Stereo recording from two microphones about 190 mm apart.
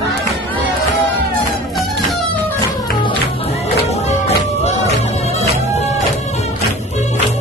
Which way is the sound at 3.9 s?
35° left (ahead or behind).